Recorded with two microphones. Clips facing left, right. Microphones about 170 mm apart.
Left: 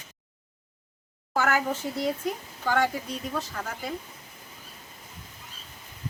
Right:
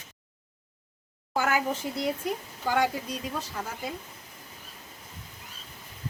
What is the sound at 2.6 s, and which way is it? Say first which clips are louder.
Speech: left 1 dB; 10° right (ahead or behind).